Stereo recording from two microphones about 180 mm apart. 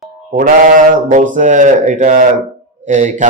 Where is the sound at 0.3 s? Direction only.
50° right (ahead or behind).